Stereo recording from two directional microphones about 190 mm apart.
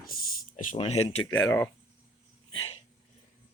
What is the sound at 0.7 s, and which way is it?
Speech, 35° left (ahead or behind).